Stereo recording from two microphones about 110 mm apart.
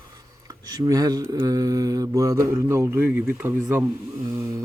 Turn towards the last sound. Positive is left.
turn(degrees=-30)  # may be behind; listen again after turning